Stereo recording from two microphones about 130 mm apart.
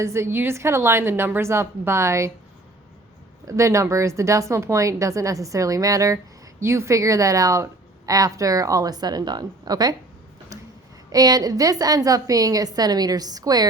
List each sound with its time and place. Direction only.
0.0 s a woman's voice: 20° right (ahead or behind)
3.4 s a woman's voice: 25° right (ahead or behind)
11.1 s a woman's voice: 30° right (ahead or behind)